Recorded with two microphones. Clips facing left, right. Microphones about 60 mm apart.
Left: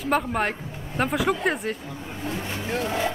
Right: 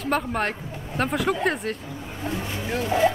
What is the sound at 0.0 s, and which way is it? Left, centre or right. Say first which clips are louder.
Speech: left 1 dB; centre.